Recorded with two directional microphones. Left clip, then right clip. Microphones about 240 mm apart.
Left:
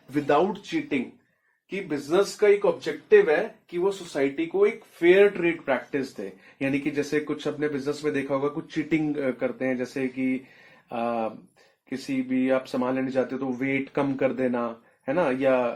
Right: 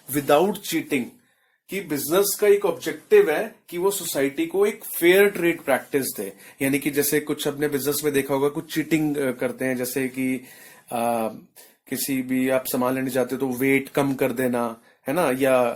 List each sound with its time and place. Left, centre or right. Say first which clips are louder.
0.1 s speech: right 3 dB; right
3.8 s speech: right 2 dB; right